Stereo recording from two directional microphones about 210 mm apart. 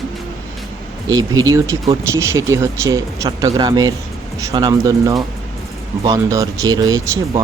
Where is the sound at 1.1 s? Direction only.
15° right (ahead or behind).